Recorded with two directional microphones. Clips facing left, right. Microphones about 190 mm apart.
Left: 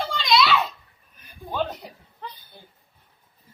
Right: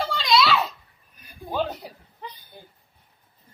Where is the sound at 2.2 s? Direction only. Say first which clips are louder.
Even; 15° right (ahead or behind).